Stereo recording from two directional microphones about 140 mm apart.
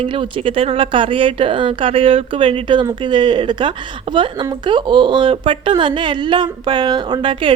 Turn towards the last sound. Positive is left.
turn(degrees=-35)  # may be behind; listen again after turning